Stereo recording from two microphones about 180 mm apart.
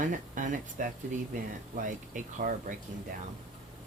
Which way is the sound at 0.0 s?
45° right (ahead or behind).